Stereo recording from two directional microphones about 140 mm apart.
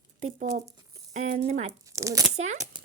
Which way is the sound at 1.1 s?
55° right (ahead or behind).